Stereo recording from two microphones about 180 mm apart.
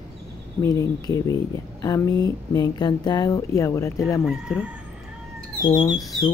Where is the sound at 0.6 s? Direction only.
20° left (ahead or behind).